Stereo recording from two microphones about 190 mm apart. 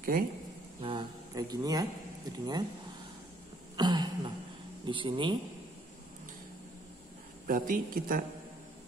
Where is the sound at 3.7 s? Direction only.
20° right (ahead or behind).